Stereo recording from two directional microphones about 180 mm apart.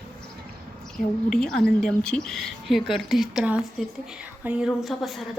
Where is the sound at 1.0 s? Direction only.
50° left (ahead or behind).